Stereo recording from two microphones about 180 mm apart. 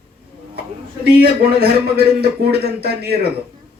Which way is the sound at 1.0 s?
60° right (ahead or behind).